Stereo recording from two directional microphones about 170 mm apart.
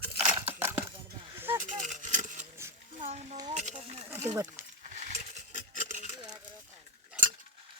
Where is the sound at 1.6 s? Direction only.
50° right (ahead or behind).